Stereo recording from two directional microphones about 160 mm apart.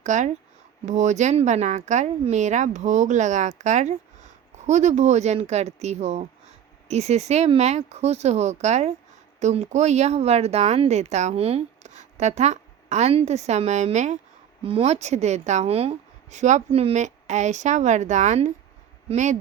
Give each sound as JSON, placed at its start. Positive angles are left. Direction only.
{"t": 0.0, "sound": "a woman's voice", "side_deg": -50}
{"t": 14.6, "sound": "a woman's voice", "side_deg": -35}